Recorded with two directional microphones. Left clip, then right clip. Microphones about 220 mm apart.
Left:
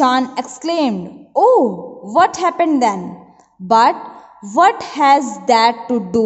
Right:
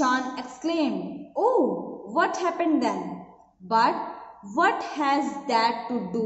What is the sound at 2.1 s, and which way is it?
A woman's voice, 50° left (ahead or behind).